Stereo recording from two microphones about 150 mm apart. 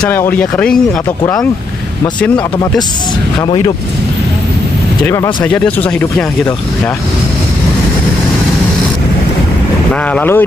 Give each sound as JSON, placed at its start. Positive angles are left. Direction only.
{"t": 0.1, "sound": "speech", "side_deg": 15}
{"t": 3.3, "sound": "speech", "side_deg": 35}
{"t": 5.0, "sound": "speech", "side_deg": 20}
{"t": 5.4, "sound": "speech", "side_deg": 10}
{"t": 10.1, "sound": "speech", "side_deg": 15}